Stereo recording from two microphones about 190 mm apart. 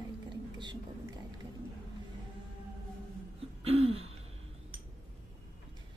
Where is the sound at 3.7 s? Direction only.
30° right (ahead or behind).